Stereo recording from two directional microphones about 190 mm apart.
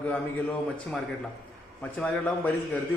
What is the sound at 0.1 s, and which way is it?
Speech, 5° left (ahead or behind).